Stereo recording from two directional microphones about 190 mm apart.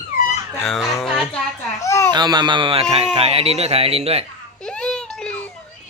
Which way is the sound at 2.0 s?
20° right (ahead or behind).